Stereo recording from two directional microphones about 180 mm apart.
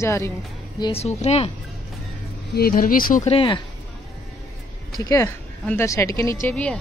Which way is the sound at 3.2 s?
30° left (ahead or behind).